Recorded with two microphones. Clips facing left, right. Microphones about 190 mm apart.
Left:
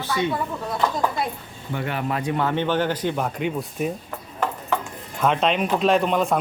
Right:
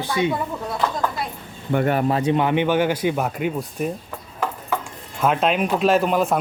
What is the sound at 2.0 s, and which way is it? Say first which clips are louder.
Speech: right 5 dB; 25° right (ahead or behind).